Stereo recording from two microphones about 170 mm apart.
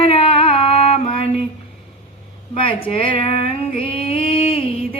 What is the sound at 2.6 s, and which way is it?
Female singing, 30° left (ahead or behind).